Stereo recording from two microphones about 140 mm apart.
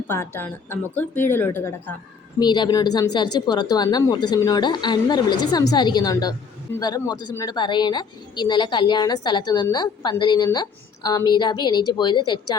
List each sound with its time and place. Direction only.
0.1 s speech: 15° left (ahead or behind)
2.4 s a woman's voice: 30° left (ahead or behind)